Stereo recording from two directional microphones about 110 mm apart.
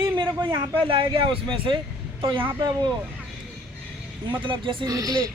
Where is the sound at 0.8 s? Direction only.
55° right (ahead or behind).